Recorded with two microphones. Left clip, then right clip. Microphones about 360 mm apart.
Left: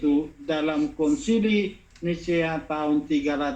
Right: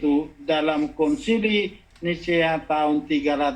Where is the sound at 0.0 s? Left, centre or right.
Right.